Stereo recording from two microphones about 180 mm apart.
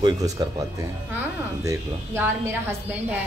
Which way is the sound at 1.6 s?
15° right (ahead or behind).